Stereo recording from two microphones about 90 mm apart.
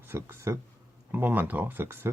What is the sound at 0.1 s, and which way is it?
Speech, 25° right (ahead or behind).